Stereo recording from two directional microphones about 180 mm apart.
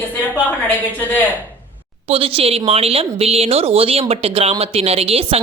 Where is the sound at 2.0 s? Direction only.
30° right (ahead or behind).